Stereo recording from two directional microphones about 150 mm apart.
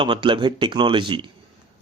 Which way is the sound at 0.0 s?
35° right (ahead or behind).